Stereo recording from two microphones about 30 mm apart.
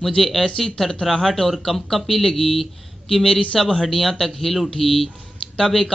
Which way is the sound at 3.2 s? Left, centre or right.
Left.